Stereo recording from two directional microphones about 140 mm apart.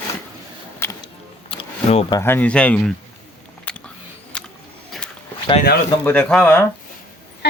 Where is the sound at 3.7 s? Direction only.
10° left (ahead or behind).